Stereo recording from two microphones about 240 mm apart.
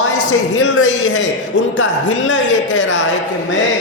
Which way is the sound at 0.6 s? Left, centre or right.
Left.